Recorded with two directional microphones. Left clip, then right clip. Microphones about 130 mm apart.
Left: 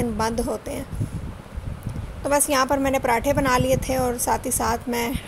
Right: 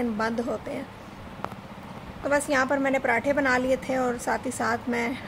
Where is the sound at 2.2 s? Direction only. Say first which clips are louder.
Left 3 dB; 35° left (ahead or behind).